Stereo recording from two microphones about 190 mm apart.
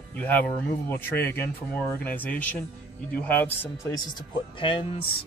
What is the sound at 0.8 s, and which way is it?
Speech, 10° left (ahead or behind).